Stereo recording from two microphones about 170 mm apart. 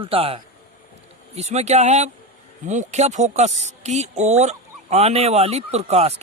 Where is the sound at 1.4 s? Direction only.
40° right (ahead or behind).